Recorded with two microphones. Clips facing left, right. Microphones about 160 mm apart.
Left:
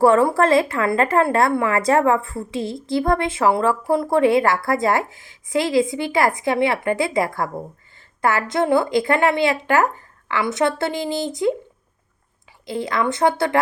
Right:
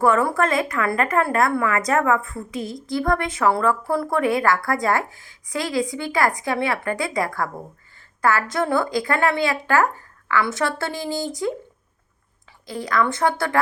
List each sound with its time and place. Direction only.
0.0 s a woman's voice: 30° left (ahead or behind)
12.6 s a woman's voice: 25° left (ahead or behind)